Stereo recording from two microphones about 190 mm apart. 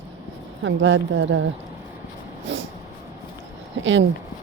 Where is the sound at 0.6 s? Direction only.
85° right.